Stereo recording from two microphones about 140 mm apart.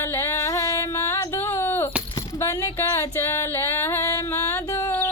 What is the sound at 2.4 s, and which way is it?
Music, 20° left (ahead or behind).